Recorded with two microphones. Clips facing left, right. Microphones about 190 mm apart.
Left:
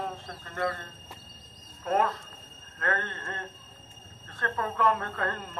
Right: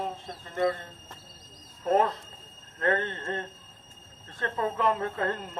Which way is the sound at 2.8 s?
20° right (ahead or behind).